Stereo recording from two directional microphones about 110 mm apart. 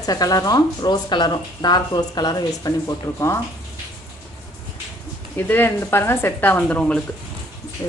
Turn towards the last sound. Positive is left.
turn(degrees=30)  # may be behind; listen again after turning